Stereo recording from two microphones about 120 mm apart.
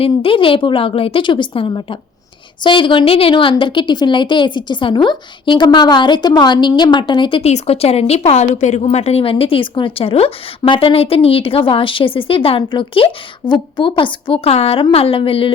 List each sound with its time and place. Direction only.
0.0 s a woman's voice: 50° left (ahead or behind)
7.5 s a woman's voice: 60° left (ahead or behind)